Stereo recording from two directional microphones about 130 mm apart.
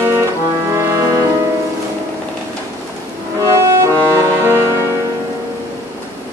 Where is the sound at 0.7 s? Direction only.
20° right (ahead or behind).